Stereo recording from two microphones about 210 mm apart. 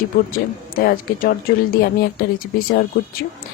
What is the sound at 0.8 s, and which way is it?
Speech, 40° left (ahead or behind).